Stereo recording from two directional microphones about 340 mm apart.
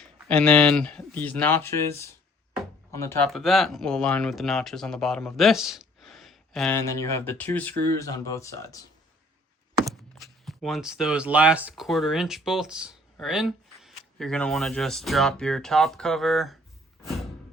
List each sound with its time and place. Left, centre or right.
0.0 s speech: centre
9.8 s speech: centre